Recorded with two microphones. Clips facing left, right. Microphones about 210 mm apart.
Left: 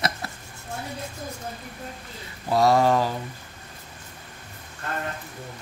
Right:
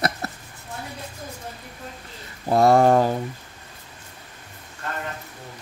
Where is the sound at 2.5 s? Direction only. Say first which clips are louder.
Right 4 dB; 50° right (ahead or behind).